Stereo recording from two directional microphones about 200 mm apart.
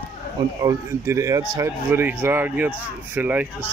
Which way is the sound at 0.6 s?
15° right (ahead or behind).